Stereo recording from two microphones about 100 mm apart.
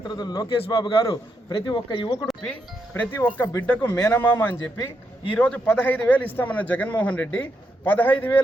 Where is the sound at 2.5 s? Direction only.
15° left (ahead or behind).